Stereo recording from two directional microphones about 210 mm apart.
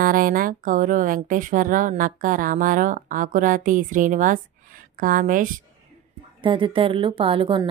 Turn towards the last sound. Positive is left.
turn(degrees=-25)  # may be behind; listen again after turning